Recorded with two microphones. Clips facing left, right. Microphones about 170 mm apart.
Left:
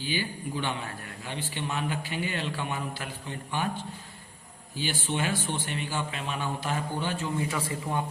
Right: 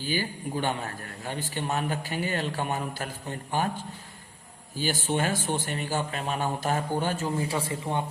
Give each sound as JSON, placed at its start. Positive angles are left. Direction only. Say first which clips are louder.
{"t": 0.0, "sound": "a man's voice", "louder": "right 2 dB", "side_deg": -45}
{"t": 4.8, "sound": "a man's voice", "louder": "right 3 dB", "side_deg": -45}